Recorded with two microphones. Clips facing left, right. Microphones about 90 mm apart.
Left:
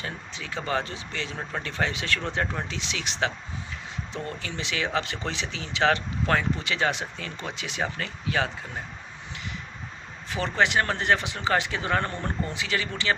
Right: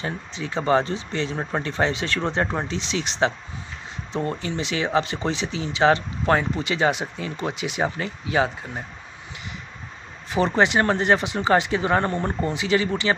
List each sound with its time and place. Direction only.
0.0 s speech: 30° right (ahead or behind)
10.3 s speech: 20° right (ahead or behind)